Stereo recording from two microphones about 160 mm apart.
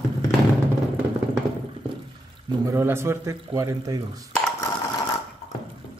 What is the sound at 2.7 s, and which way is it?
A man's voice, 15° right (ahead or behind).